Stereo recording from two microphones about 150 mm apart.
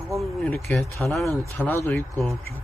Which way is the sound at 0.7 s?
10° left (ahead or behind).